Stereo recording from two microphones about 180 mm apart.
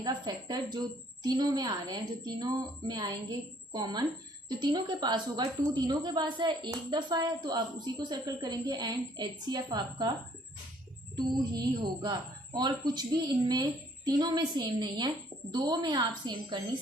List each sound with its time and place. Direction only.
0.0 s a woman's voice: 20° right (ahead or behind)
11.2 s a woman's voice: 25° right (ahead or behind)